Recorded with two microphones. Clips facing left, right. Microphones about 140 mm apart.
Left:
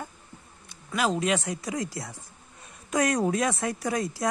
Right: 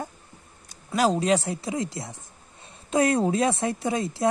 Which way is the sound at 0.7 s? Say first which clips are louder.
Right 4 dB; 35° right (ahead or behind).